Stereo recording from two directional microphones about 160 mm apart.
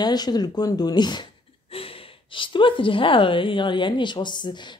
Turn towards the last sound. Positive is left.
turn(degrees=30)  # may be behind; listen again after turning